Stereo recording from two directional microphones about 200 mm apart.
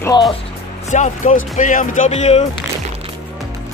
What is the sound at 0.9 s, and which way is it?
Speech, 35° left (ahead or behind).